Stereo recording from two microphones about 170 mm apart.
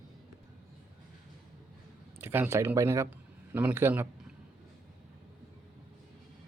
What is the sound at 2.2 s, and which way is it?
Speech, 15° right (ahead or behind).